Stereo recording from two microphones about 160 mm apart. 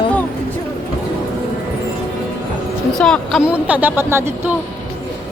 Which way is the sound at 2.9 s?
5° left (ahead or behind).